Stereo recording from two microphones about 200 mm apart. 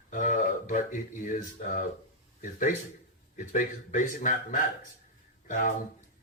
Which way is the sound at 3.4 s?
40° left (ahead or behind).